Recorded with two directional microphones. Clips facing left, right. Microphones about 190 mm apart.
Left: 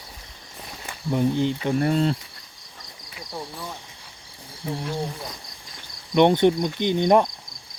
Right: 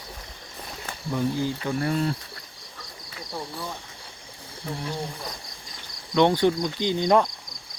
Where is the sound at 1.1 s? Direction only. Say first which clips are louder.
Left 4 dB; 20° left (ahead or behind).